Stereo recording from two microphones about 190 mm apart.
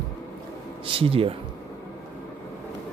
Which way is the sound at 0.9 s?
30° right (ahead or behind).